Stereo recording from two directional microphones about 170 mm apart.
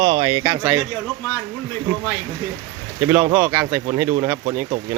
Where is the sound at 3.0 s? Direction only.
15° right (ahead or behind).